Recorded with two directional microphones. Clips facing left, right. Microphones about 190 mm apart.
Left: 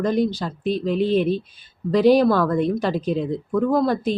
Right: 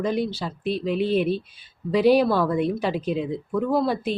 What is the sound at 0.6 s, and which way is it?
Speech, 40° left (ahead or behind).